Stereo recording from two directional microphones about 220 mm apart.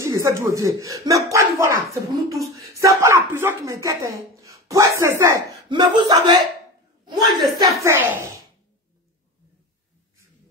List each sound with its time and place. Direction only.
0.0 s a woman's voice: 15° right (ahead or behind)